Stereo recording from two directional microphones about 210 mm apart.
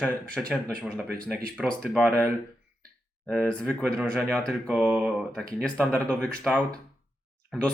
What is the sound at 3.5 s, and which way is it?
Speech, 5° left (ahead or behind).